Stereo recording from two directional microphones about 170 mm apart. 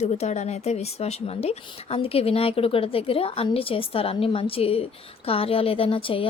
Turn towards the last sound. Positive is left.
turn(degrees=30)  # may be behind; listen again after turning